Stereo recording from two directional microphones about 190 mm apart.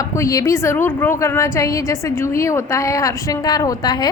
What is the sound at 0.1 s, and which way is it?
A woman's voice, 15° left (ahead or behind).